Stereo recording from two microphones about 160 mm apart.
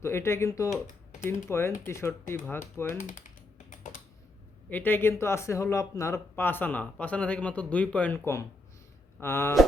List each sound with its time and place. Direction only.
0.0 s speech: 15° left (ahead or behind)
3.0 s speech: 50° left (ahead or behind)
3.7 s computer keyboard: 50° left (ahead or behind)
4.7 s speech: 10° left (ahead or behind)